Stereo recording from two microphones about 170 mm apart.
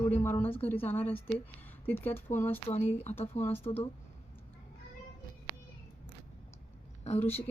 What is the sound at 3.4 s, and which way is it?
Speech, 40° left (ahead or behind).